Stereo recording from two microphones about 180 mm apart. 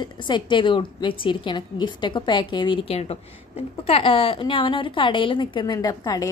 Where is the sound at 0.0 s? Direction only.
25° left (ahead or behind).